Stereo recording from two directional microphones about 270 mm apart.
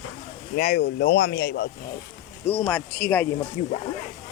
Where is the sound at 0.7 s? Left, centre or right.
Left.